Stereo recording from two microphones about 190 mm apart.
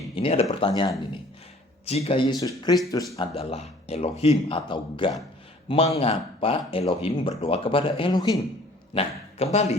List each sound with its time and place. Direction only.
0.2 s speech: 30° left (ahead or behind)
3.2 s a man's voice: 35° left (ahead or behind)
9.0 s a man's voice: 35° left (ahead or behind)